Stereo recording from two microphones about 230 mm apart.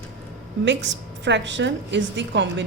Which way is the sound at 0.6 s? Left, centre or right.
Right.